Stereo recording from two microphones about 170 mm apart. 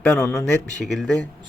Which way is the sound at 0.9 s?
Centre (ahead or behind).